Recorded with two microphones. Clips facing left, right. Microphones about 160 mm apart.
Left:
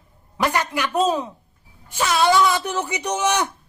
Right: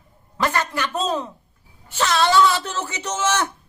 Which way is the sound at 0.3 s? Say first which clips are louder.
Left 1 dB; 15° left (ahead or behind).